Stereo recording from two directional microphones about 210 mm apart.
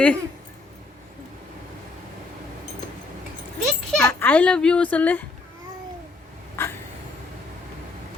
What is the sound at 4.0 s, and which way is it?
A child's voice, 5° left (ahead or behind).